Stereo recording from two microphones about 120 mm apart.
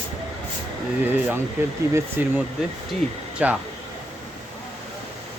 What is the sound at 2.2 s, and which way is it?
Speech, 15° right (ahead or behind).